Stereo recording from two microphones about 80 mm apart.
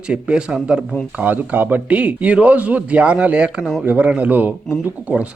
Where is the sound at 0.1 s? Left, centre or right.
Centre.